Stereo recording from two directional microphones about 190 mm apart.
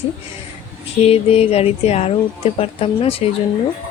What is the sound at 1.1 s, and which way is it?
Speech, 30° left (ahead or behind).